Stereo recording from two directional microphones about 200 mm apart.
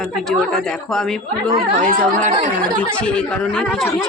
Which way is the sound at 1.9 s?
40° right (ahead or behind).